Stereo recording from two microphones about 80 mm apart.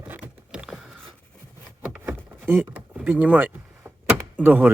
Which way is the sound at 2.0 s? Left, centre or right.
Right.